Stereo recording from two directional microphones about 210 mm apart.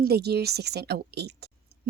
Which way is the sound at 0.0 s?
50° right (ahead or behind).